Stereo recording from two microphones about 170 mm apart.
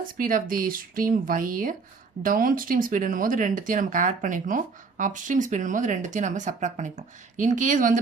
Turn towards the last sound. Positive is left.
turn(degrees=-50)  # may be behind; listen again after turning